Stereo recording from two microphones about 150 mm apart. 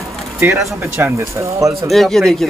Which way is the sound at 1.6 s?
Centre (ahead or behind).